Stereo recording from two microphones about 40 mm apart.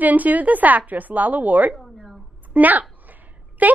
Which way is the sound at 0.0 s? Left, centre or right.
Right.